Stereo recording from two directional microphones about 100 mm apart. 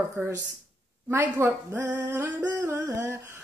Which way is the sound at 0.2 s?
20° right (ahead or behind).